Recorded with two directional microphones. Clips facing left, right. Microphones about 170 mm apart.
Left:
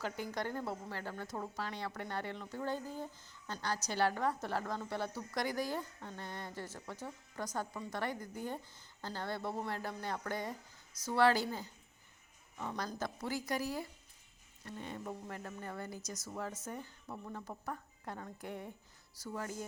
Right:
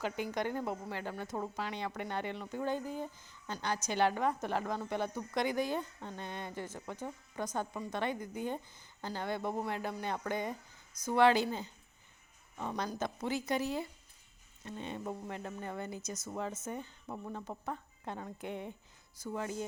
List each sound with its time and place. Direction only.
0.0 s a woman's voice: 20° right (ahead or behind)